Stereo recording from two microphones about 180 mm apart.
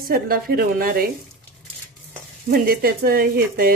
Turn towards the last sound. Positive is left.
turn(degrees=-55)  # may be behind; listen again after turning